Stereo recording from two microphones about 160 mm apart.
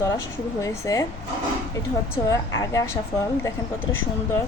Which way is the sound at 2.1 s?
20° left (ahead or behind).